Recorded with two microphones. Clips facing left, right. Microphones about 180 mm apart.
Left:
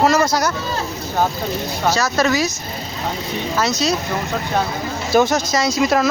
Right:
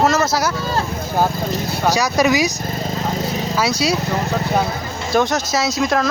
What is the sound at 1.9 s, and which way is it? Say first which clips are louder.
Speech: right 2 dB; 15° right (ahead or behind).